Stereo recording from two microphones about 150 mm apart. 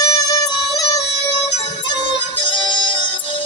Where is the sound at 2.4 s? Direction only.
35° left (ahead or behind).